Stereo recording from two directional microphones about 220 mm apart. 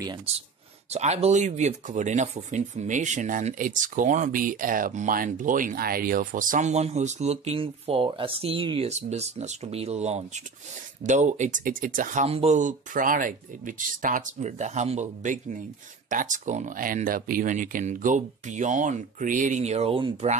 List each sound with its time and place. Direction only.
0.0 s speech: 20° right (ahead or behind)